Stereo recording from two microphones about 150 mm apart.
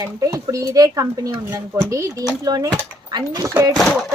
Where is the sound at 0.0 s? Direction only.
20° right (ahead or behind).